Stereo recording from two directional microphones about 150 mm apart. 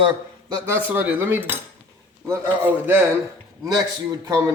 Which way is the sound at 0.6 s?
10° right (ahead or behind).